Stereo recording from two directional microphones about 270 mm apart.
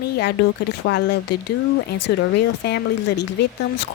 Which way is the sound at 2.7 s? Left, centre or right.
Left.